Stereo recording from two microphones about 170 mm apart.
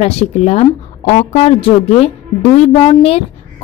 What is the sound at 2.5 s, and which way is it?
Speech, 40° left (ahead or behind).